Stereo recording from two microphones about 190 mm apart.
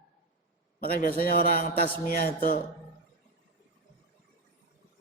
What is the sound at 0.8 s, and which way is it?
A man's voice, 50° left (ahead or behind).